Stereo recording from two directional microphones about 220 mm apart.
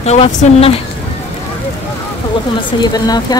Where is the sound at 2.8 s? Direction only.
20° left (ahead or behind).